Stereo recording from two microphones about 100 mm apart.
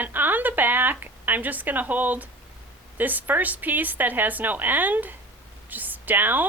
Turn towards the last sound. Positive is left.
turn(degrees=-20)  # may be behind; listen again after turning